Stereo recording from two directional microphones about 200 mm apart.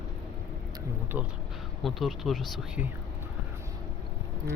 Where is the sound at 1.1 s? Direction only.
5° right (ahead or behind).